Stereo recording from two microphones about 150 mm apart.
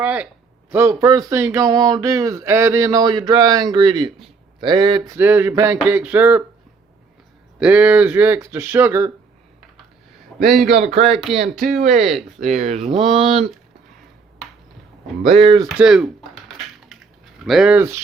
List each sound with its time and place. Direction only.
0.0 s speech: 10° right (ahead or behind); by 5.1 s 30° right (ahead or behind)
5.1 s speech: 15° right (ahead or behind)
7.6 s speech: 5° right (ahead or behind)
10.2 s a sound: centre (ahead or behind)
10.9 s speech: 40° right (ahead or behind)
11.6 s speech: 60° right (ahead or behind)
12.0 s speech: centre (ahead or behind)
12.5 s speech: 50° right (ahead or behind)
15.3 s speech: 45° right (ahead or behind)
15.8 s speech: 5° right (ahead or behind)
17.4 s speech: centre (ahead or behind)